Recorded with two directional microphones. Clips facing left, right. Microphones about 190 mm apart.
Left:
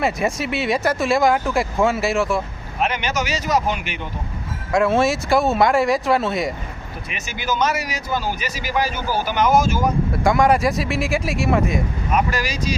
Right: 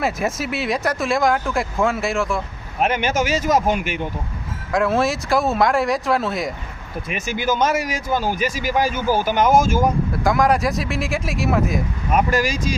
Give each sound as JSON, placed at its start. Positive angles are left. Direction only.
{"t": 0.0, "sound": "speech", "side_deg": 0}
{"t": 2.8, "sound": "a man's voice", "side_deg": -50}
{"t": 4.7, "sound": "speech", "side_deg": 0}
{"t": 7.1, "sound": "a man's voice", "side_deg": -50}
{"t": 10.1, "sound": "speech", "side_deg": 0}
{"t": 12.1, "sound": "a man's voice", "side_deg": -50}